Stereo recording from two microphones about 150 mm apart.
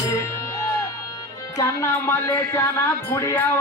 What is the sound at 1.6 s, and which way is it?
Speech, 20° left (ahead or behind).